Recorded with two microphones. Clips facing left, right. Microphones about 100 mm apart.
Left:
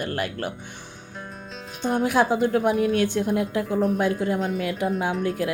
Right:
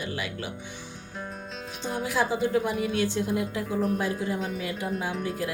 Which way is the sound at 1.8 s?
55° left (ahead or behind).